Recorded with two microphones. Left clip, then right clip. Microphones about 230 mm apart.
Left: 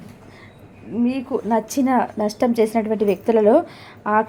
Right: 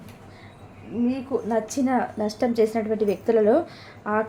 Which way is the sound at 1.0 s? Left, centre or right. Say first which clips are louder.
Left 3 dB; left.